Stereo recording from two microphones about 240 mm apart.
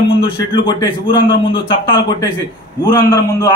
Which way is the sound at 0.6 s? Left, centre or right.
Centre.